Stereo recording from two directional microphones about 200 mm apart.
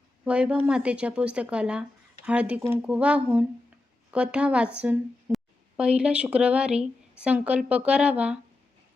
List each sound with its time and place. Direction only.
0.3 s speech: 5° right (ahead or behind)